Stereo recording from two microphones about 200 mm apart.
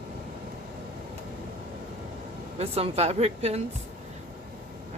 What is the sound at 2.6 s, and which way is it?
Speech, 30° right (ahead or behind).